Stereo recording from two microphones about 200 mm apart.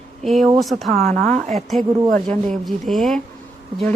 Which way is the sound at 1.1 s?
35° right (ahead or behind).